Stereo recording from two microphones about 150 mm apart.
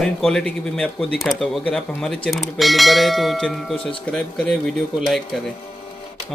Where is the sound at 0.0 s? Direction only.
5° left (ahead or behind).